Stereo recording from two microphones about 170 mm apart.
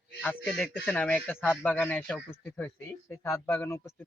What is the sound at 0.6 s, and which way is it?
A man's voice, 10° left (ahead or behind).